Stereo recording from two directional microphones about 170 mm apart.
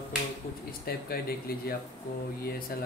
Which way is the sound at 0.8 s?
65° left (ahead or behind).